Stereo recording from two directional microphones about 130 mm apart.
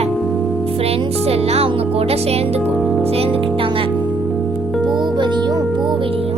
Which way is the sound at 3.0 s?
50° right (ahead or behind).